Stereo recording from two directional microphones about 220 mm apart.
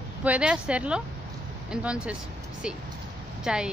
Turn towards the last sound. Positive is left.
turn(degrees=-5)  # may be behind; listen again after turning